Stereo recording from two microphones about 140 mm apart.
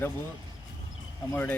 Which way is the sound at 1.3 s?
15° left (ahead or behind).